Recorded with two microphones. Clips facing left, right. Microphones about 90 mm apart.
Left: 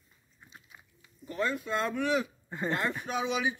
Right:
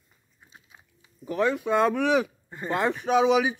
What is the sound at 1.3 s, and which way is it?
Speech, 75° right (ahead or behind).